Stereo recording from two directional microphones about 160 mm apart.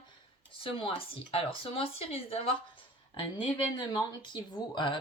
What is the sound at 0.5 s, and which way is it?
Speech, 30° left (ahead or behind).